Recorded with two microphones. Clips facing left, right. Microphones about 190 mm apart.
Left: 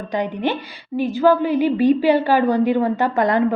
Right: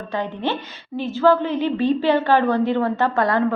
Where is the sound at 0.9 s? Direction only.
15° left (ahead or behind).